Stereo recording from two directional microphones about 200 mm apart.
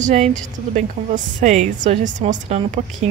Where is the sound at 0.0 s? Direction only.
35° right (ahead or behind).